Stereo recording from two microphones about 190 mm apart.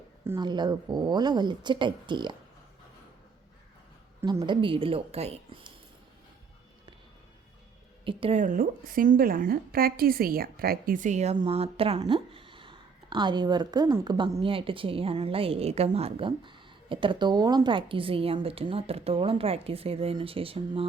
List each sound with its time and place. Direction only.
0.3 s speech: 20° right (ahead or behind)
4.4 s speech: 25° right (ahead or behind)
8.0 s speech: 30° right (ahead or behind)
8.4 s a woman's voice: 45° right (ahead or behind); by 20.8 s 30° right (ahead or behind)